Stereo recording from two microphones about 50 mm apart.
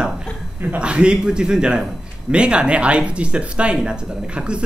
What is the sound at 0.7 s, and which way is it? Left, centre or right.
A man's voice, centre.